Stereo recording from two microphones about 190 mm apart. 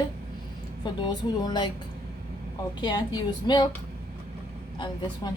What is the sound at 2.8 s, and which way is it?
Speech, 25° left (ahead or behind).